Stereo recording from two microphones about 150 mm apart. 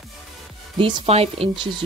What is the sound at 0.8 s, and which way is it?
Speech, 35° right (ahead or behind).